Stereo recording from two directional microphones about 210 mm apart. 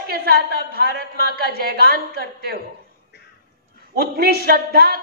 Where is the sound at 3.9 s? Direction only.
50° right (ahead or behind).